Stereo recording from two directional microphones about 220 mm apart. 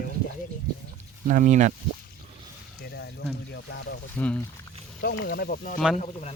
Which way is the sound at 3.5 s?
50° left (ahead or behind).